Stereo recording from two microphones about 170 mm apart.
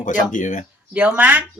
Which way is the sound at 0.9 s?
10° right (ahead or behind).